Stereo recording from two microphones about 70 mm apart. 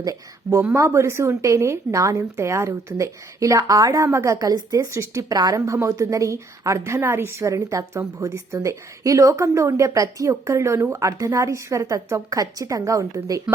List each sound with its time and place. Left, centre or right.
0.0 s speech: right
0.7 s a woman's voice: right
4.4 s a woman's voice: right
5.5 s a woman's voice: right